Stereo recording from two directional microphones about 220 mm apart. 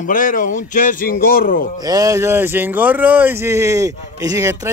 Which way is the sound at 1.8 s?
15° right (ahead or behind).